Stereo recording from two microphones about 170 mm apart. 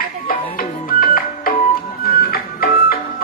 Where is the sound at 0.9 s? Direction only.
55° left (ahead or behind).